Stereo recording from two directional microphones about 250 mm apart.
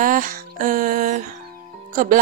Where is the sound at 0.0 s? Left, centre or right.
Right.